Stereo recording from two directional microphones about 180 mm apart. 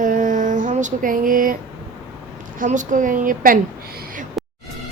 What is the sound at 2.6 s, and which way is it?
A woman's voice, 45° right (ahead or behind).